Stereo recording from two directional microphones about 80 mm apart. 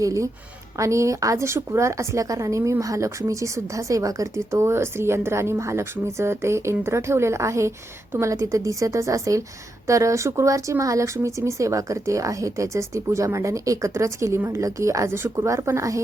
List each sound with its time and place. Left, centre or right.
0.0 s a woman's voice: right